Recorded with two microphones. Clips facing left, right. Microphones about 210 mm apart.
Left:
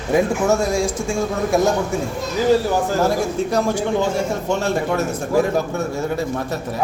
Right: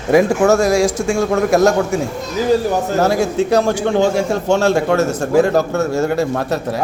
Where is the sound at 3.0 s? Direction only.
75° right (ahead or behind).